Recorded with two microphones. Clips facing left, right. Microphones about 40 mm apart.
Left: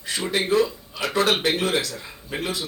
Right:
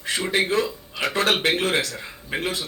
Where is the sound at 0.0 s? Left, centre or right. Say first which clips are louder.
Right 2 dB; right.